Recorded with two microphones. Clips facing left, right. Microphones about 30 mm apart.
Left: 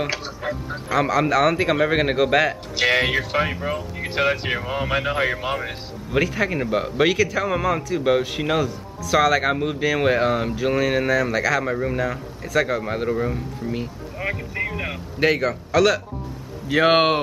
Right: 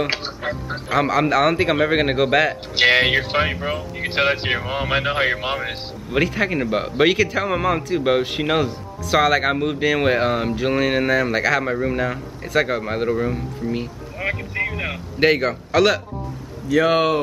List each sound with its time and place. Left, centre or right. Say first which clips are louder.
0.1 s music: right 2 dB; right
0.9 s speech: right 1 dB; centre
2.7 s speech: right 5 dB; right
6.1 s speech: right 1 dB; centre
16.6 s speech: even; left